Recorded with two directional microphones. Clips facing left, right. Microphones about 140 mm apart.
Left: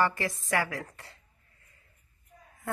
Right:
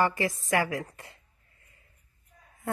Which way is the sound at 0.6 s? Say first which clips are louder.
Right 3 dB; 20° right (ahead or behind).